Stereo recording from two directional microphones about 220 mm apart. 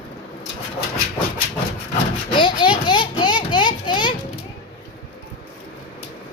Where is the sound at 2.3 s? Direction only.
20° left (ahead or behind).